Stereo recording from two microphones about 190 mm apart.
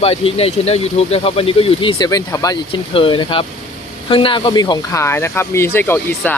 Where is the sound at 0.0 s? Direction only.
30° left (ahead or behind).